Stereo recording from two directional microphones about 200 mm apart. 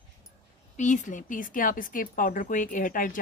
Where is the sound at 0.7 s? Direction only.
35° left (ahead or behind).